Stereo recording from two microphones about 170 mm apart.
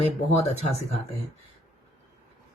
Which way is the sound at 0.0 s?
40° left (ahead or behind).